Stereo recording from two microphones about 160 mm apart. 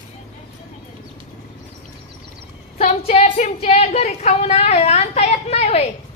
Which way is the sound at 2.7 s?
40° left (ahead or behind).